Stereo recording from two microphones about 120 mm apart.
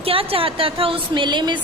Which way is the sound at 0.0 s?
50° right (ahead or behind).